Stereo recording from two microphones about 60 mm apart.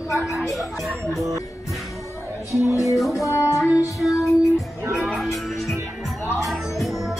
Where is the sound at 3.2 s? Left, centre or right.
Left.